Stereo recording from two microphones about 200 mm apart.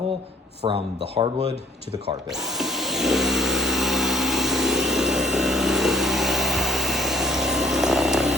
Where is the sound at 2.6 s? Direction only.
Centre (ahead or behind).